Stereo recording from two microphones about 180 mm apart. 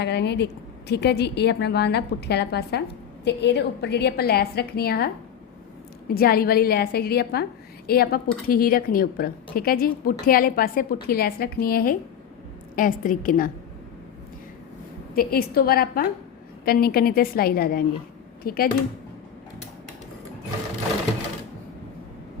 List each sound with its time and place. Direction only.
0.0 s a woman's voice: 70° left (ahead or behind); by 13.5 s 50° left (ahead or behind)
15.1 s a woman's voice: 55° left (ahead or behind)